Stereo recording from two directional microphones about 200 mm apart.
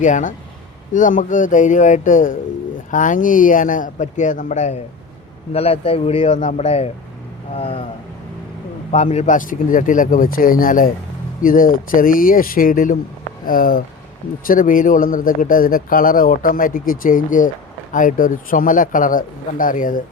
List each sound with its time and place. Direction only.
0.0 s speech: 40° left (ahead or behind)
8.9 s speech: 35° left (ahead or behind)